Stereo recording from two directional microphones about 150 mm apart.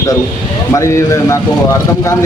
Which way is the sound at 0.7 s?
20° left (ahead or behind).